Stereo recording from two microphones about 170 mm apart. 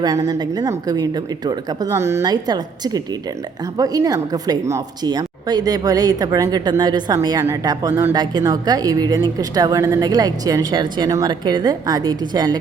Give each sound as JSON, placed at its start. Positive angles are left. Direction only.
{"t": 0.0, "sound": "a woman's voice", "side_deg": -20}